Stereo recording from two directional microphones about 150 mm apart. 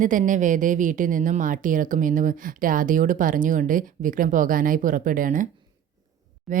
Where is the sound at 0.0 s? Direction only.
60° right (ahead or behind).